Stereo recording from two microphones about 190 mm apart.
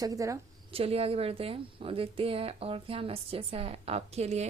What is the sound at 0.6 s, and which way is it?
A woman's voice, 30° right (ahead or behind).